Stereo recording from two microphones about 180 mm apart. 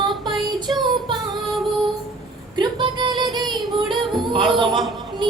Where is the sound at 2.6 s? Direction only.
25° right (ahead or behind).